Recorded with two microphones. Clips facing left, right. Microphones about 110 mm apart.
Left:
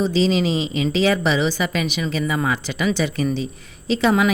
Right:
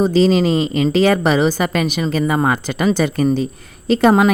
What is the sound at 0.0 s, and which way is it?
A woman's voice, 45° right (ahead or behind).